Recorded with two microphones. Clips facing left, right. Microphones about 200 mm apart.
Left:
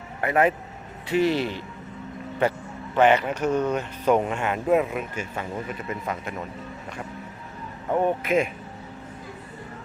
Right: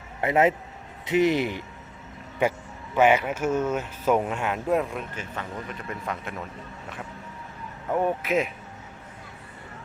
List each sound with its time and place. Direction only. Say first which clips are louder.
0.2 s a man's voice: even; 25° right (ahead or behind)
2.9 s speech: left 1 dB; 10° right (ahead or behind)
8.0 s speech: left 2 dB; 5° right (ahead or behind)